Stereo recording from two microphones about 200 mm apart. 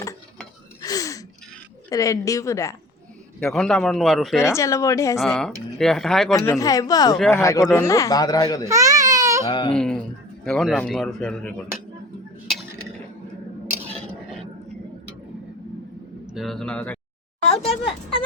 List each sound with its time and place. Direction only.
0.8 s gasp: 20° left (ahead or behind)
1.9 s a man's voice: 15° left (ahead or behind)
3.4 s speech: 5° left (ahead or behind)
4.4 s a man's voice: 15° left (ahead or behind)
5.2 s speech: centre (ahead or behind)
6.3 s a man's voice: 15° left (ahead or behind)
8.6 s baby cry: 15° right (ahead or behind)
9.5 s speech: 25° left (ahead or behind)
9.7 s speech: 5° left (ahead or behind)
16.3 s speech: centre (ahead or behind)
17.7 s speech: 30° left (ahead or behind)